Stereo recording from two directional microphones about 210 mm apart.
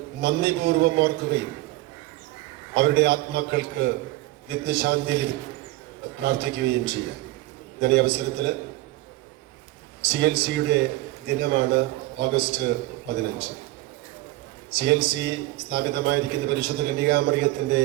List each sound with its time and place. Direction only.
0.2 s a man's voice: 50° right (ahead or behind)
2.7 s a man's voice: 50° right (ahead or behind)
10.0 s a man's voice: 50° right (ahead or behind)
14.7 s a man's voice: 50° right (ahead or behind)